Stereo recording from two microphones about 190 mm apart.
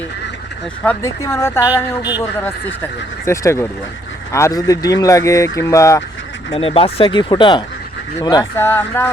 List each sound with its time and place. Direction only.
0.9 s speech: 15° left (ahead or behind)
3.2 s speech: 15° left (ahead or behind)
6.5 s speech: 30° left (ahead or behind); by 9.0 s 10° left (ahead or behind)